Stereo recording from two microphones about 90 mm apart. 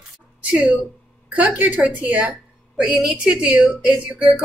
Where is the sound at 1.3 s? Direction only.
15° right (ahead or behind).